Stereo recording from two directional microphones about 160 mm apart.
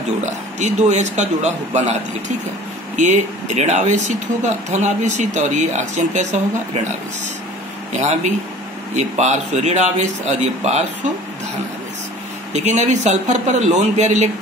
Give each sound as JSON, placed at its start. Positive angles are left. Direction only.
{"t": 0.2, "sound": "speech", "side_deg": -45}
{"t": 7.9, "sound": "speech", "side_deg": -45}
{"t": 12.6, "sound": "speech", "side_deg": -45}